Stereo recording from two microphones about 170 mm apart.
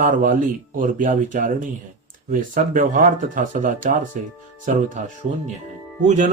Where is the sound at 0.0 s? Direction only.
50° right (ahead or behind).